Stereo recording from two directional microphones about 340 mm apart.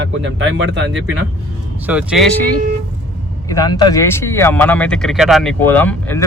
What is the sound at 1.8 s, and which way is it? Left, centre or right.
Speech, centre.